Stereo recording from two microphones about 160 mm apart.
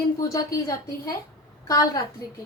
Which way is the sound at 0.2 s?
20° left (ahead or behind).